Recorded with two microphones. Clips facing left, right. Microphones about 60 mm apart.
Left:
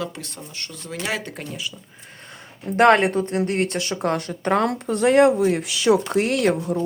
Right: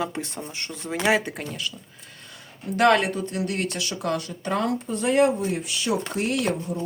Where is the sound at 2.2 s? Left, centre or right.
Left.